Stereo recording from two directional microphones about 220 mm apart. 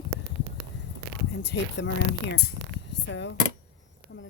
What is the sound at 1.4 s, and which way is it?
Speech, 50° left (ahead or behind).